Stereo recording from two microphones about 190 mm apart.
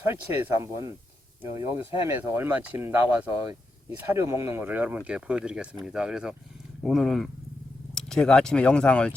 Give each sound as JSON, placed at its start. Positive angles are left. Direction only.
{"t": 0.6, "sound": "speech", "side_deg": -15}